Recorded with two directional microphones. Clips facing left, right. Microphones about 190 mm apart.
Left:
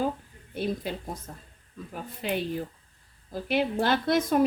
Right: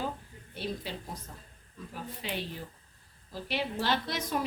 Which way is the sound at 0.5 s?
50° left (ahead or behind).